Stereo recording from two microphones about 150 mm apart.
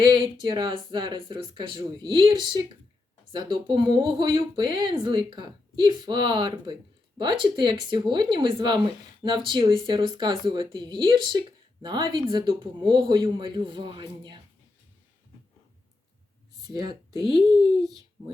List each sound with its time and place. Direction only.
0.0 s speech: 30° right (ahead or behind)
16.6 s speech: 25° right (ahead or behind)
17.3 s a child's voice: 35° left (ahead or behind)